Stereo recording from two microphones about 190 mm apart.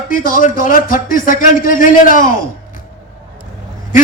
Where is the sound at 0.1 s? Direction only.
45° left (ahead or behind).